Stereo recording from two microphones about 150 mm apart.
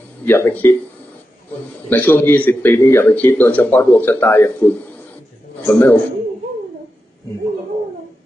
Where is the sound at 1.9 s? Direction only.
10° left (ahead or behind).